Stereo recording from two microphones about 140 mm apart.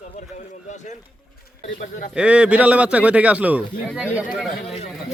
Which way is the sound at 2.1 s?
10° right (ahead or behind).